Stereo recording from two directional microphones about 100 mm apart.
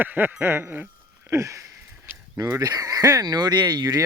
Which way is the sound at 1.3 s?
30° right (ahead or behind).